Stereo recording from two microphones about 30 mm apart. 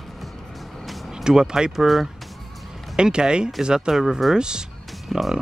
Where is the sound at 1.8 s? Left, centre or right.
Centre.